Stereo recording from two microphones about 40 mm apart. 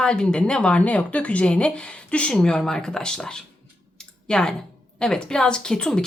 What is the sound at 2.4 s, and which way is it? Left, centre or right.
Speech, centre.